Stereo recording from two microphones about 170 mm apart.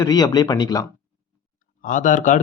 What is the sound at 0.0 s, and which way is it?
Speech, 25° left (ahead or behind).